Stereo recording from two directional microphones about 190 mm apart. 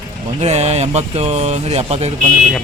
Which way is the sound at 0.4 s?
35° right (ahead or behind).